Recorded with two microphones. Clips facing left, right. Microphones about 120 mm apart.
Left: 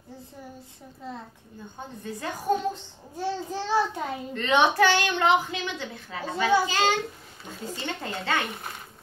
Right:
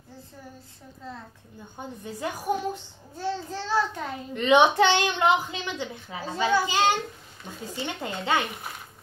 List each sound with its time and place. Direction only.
2.0 s a woman's voice: 15° right (ahead or behind)
3.2 s a child's voice: 15° left (ahead or behind)
4.3 s a woman's voice: 15° right (ahead or behind)